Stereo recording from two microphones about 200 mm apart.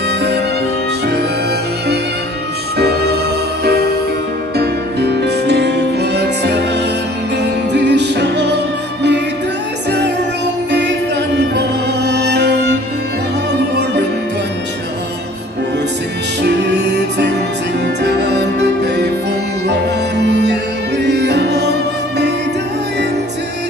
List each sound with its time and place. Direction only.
2.8 s music: 55° right (ahead or behind)
7.7 s music: 60° right (ahead or behind)
9.8 s music: 60° right (ahead or behind)
16.4 s music: 60° right (ahead or behind)